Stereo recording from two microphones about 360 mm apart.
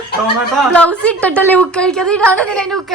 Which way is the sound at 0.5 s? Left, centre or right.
Centre.